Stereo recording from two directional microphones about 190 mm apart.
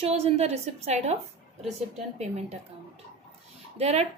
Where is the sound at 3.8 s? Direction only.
35° right (ahead or behind).